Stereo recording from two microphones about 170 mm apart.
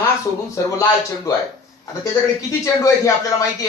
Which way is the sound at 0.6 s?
20° left (ahead or behind).